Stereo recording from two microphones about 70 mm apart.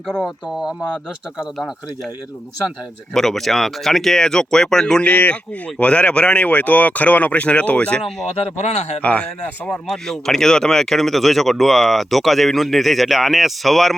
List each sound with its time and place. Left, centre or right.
3.2 s speech: centre
5.0 s speech: left; by 13.9 s centre